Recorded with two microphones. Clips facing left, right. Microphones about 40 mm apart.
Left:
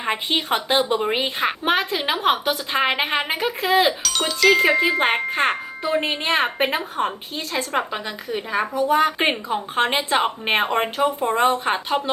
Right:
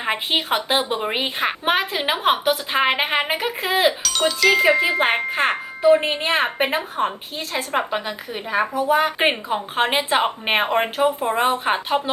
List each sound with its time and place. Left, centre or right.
0.0 s speech: centre
4.0 s speech: centre